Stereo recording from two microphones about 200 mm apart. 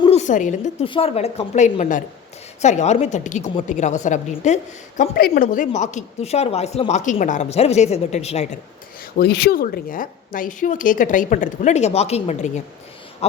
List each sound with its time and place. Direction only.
0.0 s a woman's voice: 35° left (ahead or behind)
9.1 s a woman's voice: 55° left (ahead or behind); by 12.6 s 35° left (ahead or behind)